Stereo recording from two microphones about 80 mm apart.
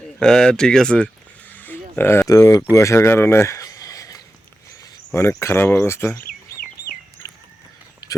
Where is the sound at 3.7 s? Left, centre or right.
Left.